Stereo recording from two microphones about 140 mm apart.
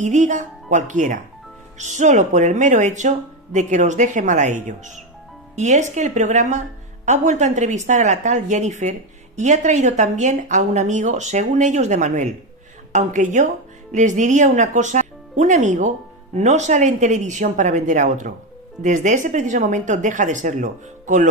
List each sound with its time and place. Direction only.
0.0 s speech: 60° right (ahead or behind)